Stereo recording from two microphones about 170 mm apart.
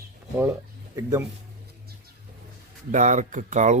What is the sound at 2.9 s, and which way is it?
Speech, 45° right (ahead or behind).